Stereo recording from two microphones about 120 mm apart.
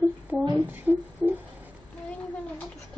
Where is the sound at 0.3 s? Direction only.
10° right (ahead or behind).